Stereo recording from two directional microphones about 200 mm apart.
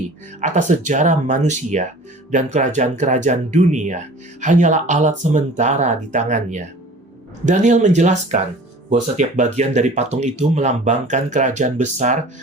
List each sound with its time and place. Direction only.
0.4 s speech: 35° right (ahead or behind)